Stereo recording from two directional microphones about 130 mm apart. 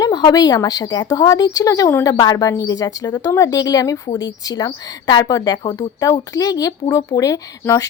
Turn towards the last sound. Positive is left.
turn(degrees=25)  # may be behind; listen again after turning